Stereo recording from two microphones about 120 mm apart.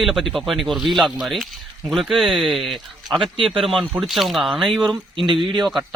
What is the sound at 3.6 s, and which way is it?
Speech, 5° left (ahead or behind).